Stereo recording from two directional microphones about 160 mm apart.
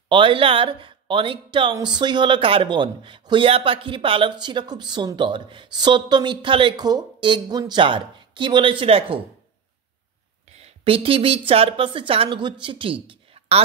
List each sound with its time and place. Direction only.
0.1 s speech: 30° right (ahead or behind)
10.5 s a woman's voice: 40° right (ahead or behind)